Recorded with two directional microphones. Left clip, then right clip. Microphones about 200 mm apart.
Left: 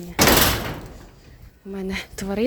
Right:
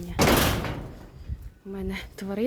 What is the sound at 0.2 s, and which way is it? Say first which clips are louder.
Door: left 5 dB; 50° left (ahead or behind).